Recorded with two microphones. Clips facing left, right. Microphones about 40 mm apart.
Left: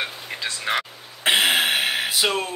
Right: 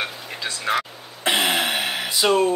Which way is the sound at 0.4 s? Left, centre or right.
Left.